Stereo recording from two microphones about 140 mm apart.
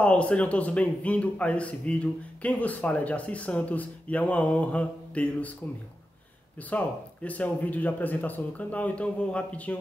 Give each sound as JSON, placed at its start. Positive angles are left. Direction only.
{"t": 0.0, "sound": "speech", "side_deg": 10}
{"t": 6.7, "sound": "speech", "side_deg": 10}